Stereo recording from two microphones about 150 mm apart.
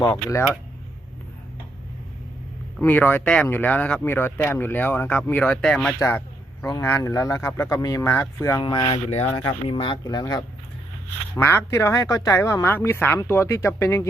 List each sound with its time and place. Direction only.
0.0 s a man's voice: 20° left (ahead or behind)
2.8 s a man's voice: 10° left (ahead or behind)
8.6 s speech: 35° left (ahead or behind)
9.0 s a man's voice: 45° left (ahead or behind); by 10.4 s 25° left (ahead or behind)
11.3 s a man's voice: 15° left (ahead or behind)